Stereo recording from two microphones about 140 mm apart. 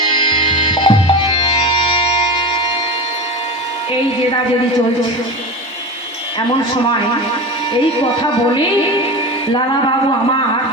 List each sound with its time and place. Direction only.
0.2 s music: 35° left (ahead or behind)